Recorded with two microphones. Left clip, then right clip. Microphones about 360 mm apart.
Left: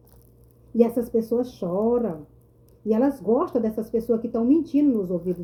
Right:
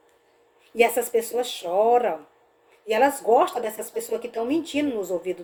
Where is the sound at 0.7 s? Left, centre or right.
Right.